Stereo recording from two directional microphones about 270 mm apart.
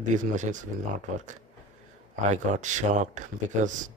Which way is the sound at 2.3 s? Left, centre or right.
Right.